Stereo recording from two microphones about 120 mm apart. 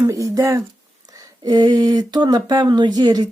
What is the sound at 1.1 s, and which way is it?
Speech, 30° right (ahead or behind).